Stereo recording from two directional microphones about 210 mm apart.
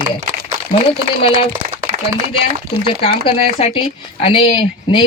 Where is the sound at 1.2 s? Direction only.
25° left (ahead or behind).